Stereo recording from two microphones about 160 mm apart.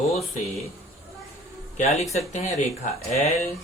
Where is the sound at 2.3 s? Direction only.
50° left (ahead or behind).